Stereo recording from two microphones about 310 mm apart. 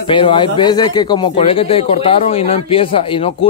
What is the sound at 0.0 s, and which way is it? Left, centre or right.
Speech, centre.